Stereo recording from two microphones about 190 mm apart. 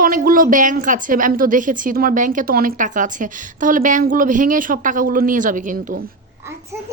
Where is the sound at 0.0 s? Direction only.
50° right (ahead or behind).